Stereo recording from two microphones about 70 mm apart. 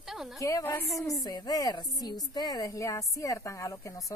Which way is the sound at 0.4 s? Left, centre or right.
Left.